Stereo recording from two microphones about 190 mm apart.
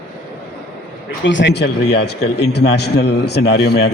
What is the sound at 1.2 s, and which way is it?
Speech, 75° left (ahead or behind).